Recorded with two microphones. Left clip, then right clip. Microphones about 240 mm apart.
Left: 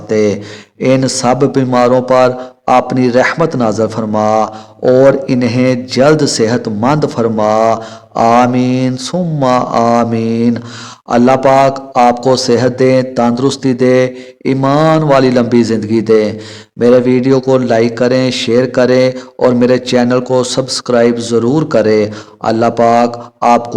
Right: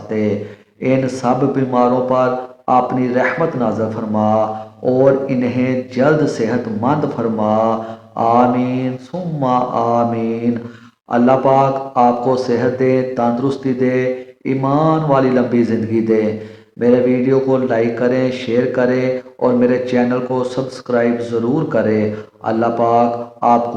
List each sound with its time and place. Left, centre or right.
0.1 s a man's voice: left